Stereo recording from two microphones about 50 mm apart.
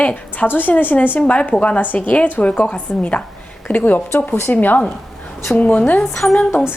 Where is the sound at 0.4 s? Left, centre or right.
Left.